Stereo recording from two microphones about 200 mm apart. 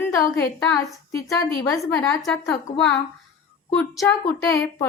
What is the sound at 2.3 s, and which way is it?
Speech, 5° left (ahead or behind).